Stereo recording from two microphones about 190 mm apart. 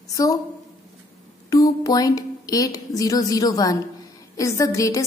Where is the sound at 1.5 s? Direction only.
20° left (ahead or behind).